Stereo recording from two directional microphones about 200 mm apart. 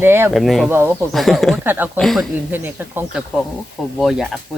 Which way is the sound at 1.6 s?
10° right (ahead or behind).